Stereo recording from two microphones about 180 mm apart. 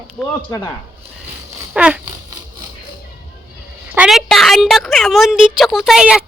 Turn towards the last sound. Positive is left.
turn(degrees=-5)  # may be behind; listen again after turning